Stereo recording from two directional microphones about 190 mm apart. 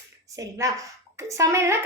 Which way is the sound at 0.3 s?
15° right (ahead or behind).